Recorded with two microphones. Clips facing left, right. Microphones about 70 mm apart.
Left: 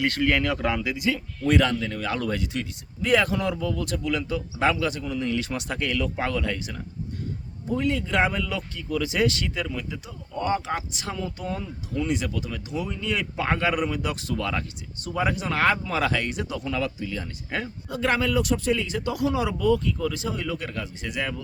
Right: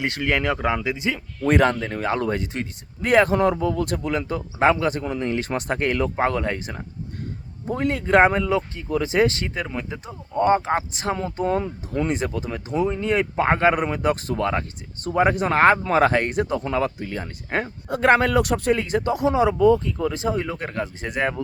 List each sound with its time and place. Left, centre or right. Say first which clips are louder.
0.0 s speech: even; centre
1.5 s speech: right 3 dB; right
19.1 s speech: right 6 dB; right